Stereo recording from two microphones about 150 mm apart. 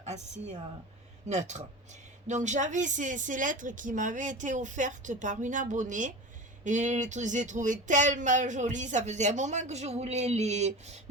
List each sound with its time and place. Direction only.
0.0 s a woman's voice: 50° right (ahead or behind)